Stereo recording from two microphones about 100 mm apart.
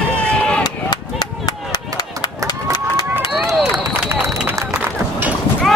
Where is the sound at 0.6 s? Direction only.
45° left (ahead or behind).